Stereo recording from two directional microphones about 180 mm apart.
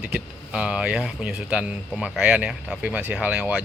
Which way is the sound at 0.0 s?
5° right (ahead or behind).